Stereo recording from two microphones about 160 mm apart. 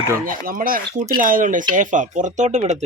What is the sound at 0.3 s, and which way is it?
Speech, 60° right (ahead or behind).